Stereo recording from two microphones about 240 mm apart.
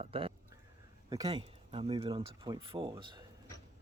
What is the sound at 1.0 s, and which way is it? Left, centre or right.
Speech, centre.